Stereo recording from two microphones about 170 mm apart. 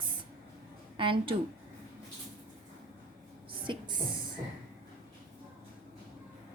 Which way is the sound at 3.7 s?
30° right (ahead or behind).